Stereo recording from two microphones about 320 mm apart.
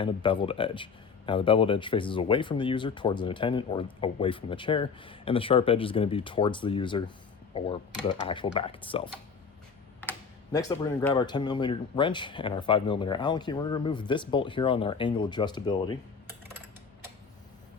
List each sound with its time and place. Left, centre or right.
0.0 s speech: centre
10.5 s speech: centre
16.5 s a sound: centre